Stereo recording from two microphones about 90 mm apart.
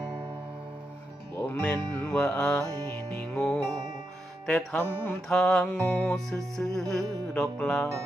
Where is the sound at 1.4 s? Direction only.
15° left (ahead or behind).